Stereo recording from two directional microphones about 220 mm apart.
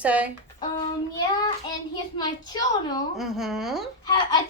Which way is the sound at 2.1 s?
20° left (ahead or behind).